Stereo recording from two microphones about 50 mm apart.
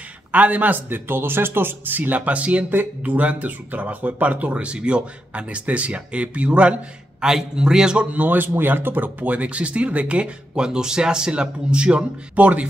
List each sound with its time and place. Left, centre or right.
0.3 s a man's voice: right
7.2 s a man's voice: centre
8.1 s speech: right